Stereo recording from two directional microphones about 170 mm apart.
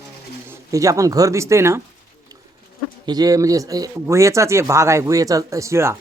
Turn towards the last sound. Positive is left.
turn(degrees=-15)  # may be behind; listen again after turning